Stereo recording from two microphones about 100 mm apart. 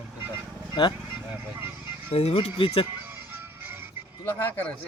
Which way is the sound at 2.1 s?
90° left.